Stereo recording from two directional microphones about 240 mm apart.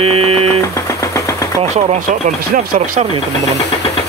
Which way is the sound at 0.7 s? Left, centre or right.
Centre.